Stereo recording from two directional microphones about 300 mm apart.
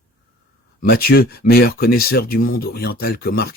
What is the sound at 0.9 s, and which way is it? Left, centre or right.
Speech, left.